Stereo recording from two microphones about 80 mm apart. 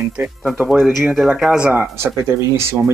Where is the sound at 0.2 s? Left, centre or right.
Right.